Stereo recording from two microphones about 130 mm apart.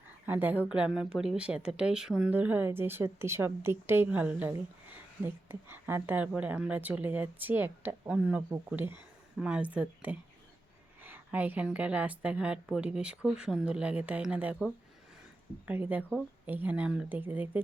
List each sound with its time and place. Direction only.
0.3 s a woman's voice: 15° right (ahead or behind)
15.6 s speech: 10° right (ahead or behind)